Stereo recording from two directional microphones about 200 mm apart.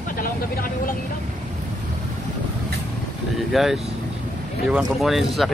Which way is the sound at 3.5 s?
Centre (ahead or behind).